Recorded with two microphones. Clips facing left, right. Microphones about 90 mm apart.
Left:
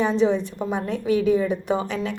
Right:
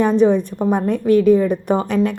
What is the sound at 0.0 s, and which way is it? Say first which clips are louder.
A woman's voice: right 6 dB; 55° right (ahead or behind).